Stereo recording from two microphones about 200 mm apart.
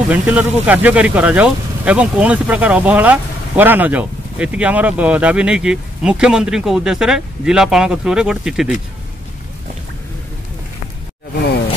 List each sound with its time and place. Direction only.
0.1 s speech: 5° right (ahead or behind)